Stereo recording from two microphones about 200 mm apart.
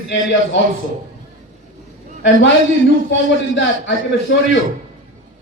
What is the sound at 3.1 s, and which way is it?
A man's voice, 65° left (ahead or behind).